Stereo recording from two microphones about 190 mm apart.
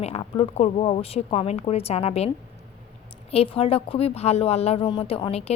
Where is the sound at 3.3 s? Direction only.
30° left (ahead or behind).